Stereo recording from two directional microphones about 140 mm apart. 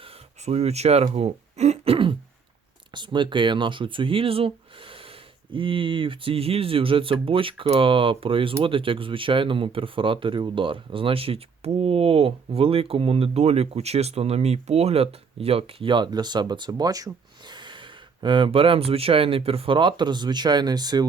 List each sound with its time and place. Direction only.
0.0 s a sound: 45° right (ahead or behind)
1.1 s throat clearing: 50° right (ahead or behind)
2.9 s speech: 35° right (ahead or behind)